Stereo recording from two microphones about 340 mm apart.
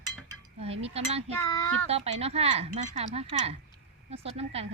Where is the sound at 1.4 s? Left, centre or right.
Centre.